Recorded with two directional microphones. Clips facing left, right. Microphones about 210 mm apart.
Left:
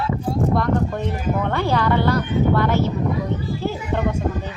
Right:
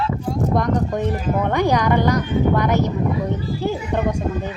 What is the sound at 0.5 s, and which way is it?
Speech, 15° right (ahead or behind).